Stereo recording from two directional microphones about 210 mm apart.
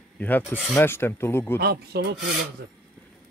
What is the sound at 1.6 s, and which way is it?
Speech, 50° right (ahead or behind).